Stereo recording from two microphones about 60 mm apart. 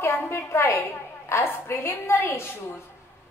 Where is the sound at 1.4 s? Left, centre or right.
Left.